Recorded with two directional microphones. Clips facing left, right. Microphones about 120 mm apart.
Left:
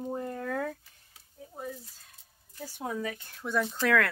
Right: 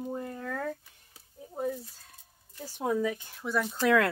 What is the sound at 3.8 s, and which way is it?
Speech, 20° right (ahead or behind).